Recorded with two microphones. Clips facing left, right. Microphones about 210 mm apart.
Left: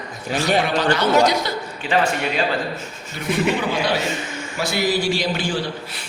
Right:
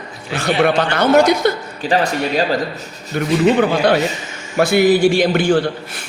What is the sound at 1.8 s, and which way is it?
Speech, 40° right (ahead or behind).